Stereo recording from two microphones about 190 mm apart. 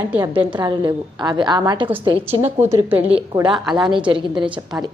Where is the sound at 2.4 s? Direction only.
10° right (ahead or behind).